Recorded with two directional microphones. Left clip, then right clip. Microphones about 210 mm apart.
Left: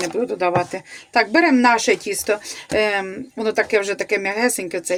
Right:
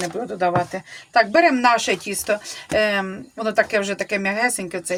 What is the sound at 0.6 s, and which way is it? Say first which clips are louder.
Speech: left 1 dB; 30° left (ahead or behind).